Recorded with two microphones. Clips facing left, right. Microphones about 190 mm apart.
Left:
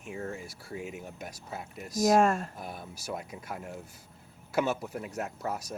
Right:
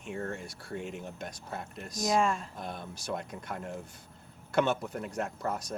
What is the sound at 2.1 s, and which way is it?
Speech, 45° left (ahead or behind).